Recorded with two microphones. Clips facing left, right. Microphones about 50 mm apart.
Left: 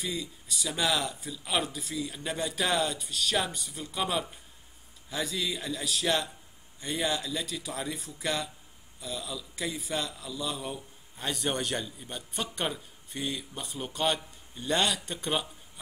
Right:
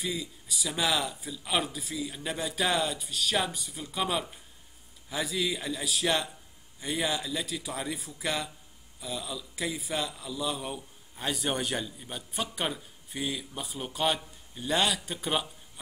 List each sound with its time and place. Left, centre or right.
0.0 s a man's voice: centre